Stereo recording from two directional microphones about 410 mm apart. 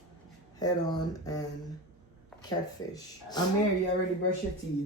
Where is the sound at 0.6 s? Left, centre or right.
Centre.